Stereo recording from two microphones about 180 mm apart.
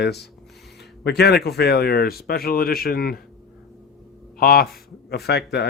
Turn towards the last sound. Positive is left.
turn(degrees=65)  # may be behind; listen again after turning